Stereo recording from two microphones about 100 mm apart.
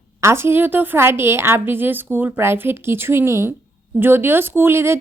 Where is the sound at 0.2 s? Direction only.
25° right (ahead or behind).